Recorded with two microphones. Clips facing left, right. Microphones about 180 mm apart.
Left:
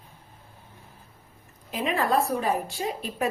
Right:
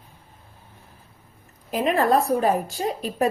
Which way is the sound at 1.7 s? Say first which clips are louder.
Right 5 dB; 40° right (ahead or behind).